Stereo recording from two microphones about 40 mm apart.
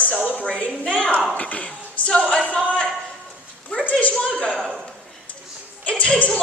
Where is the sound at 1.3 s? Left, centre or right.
Left.